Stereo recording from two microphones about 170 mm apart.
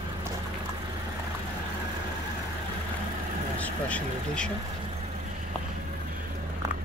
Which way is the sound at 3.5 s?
10° left (ahead or behind).